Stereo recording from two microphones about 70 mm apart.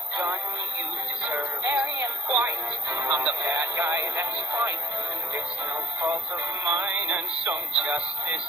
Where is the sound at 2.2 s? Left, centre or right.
Right.